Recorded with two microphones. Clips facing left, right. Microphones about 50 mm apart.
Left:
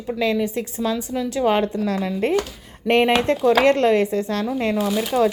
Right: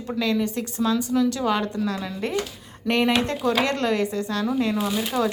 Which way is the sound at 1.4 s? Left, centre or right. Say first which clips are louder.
Left 4 dB; left.